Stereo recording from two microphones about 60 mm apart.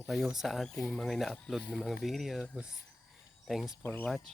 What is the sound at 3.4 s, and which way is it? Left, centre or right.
Speech, centre.